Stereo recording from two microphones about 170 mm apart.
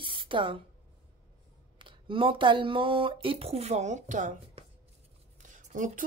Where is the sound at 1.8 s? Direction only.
30° right (ahead or behind); by 4.6 s 45° right (ahead or behind).